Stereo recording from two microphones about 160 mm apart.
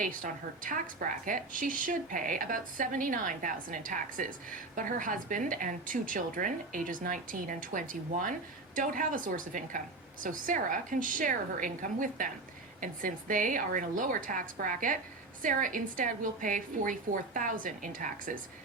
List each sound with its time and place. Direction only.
0.0 s a woman's voice: 55° right (ahead or behind)